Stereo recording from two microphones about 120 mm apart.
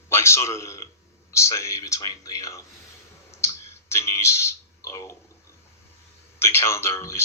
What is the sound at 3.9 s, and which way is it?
Speech, 20° left (ahead or behind).